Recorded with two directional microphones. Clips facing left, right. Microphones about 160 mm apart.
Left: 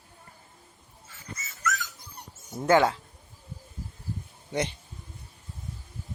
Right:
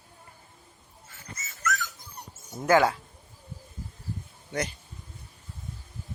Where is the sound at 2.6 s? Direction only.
25° left (ahead or behind).